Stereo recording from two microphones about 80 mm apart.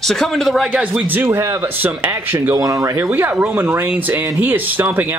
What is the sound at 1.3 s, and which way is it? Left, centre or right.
Speech, right.